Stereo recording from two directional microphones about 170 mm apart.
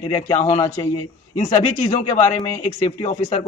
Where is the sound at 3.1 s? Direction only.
35° left (ahead or behind).